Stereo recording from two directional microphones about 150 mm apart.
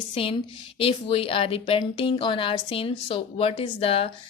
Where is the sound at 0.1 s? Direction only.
40° left (ahead or behind).